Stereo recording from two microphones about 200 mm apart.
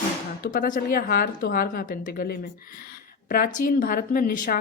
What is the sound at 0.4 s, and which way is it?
Speech, 45° left (ahead or behind).